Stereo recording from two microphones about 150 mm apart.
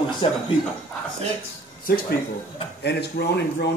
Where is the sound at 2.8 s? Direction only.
90° left.